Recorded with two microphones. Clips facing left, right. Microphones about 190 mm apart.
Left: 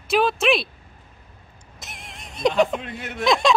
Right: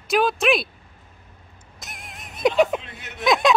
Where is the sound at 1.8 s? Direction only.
Centre (ahead or behind).